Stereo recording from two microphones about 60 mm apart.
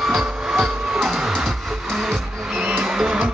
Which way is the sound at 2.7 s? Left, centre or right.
Centre.